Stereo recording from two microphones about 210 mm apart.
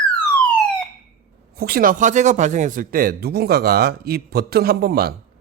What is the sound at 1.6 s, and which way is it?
Speech, 45° right (ahead or behind).